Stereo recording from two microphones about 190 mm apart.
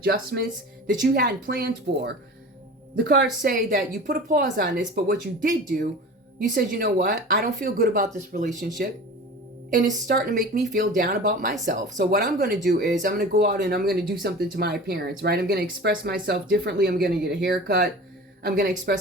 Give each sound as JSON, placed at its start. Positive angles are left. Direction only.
{"t": 0.0, "sound": "a woman's voice", "side_deg": -55}
{"t": 3.4, "sound": "a woman's voice", "side_deg": -45}
{"t": 9.6, "sound": "a woman's voice", "side_deg": -45}